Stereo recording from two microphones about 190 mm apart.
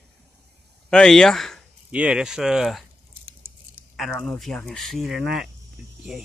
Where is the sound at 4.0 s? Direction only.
5° left (ahead or behind).